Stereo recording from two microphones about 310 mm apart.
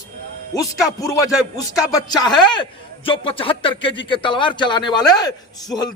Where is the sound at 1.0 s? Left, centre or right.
Centre.